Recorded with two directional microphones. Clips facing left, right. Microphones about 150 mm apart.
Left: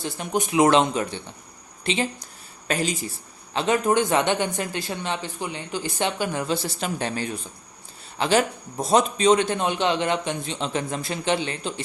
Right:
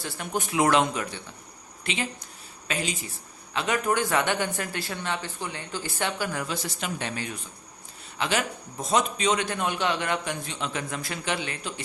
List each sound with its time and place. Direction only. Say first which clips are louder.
0.0 s speech: left 5 dB; 20° left (ahead or behind); by 3.1 s 40° left (ahead or behind)
3.5 s speech: left 5 dB; 30° left (ahead or behind)